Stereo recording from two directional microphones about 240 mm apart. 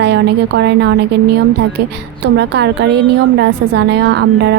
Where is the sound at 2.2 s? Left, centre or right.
Right.